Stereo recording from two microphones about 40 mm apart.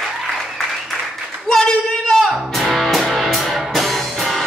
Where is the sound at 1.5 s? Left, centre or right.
Centre.